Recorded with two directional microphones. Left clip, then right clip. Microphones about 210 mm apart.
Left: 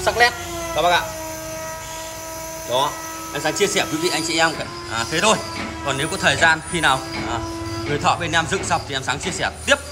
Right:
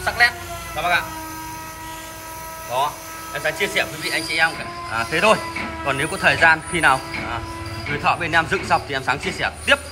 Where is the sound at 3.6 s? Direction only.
25° left (ahead or behind).